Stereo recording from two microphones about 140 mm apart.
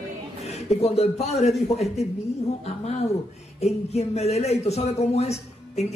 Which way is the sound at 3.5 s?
50° left (ahead or behind).